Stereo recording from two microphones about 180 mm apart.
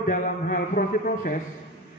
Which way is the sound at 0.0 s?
50° left (ahead or behind).